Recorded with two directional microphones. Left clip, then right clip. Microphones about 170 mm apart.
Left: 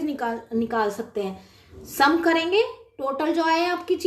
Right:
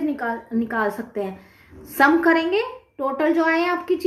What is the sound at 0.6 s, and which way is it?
A woman's voice, 40° right (ahead or behind).